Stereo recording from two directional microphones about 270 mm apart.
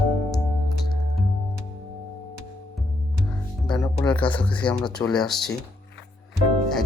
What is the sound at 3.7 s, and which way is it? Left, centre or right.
Music, centre.